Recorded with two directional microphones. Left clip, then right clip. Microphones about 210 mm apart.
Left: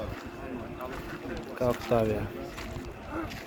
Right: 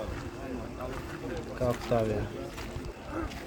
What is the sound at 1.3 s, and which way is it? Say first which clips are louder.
Speech: left 2 dB; 15° left (ahead or behind).